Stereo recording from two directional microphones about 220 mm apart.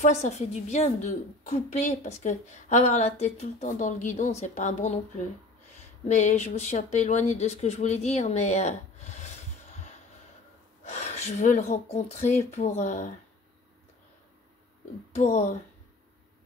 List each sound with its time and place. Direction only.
0.0 s a woman's voice: 30° left (ahead or behind)
10.8 s a woman's voice: 30° left (ahead or behind)
15.1 s a woman's voice: 30° left (ahead or behind)